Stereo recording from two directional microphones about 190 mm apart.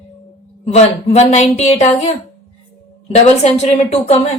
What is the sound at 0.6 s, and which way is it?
A woman's voice, 35° left (ahead or behind).